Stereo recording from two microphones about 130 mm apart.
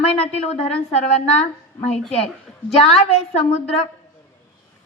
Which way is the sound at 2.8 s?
50° left (ahead or behind).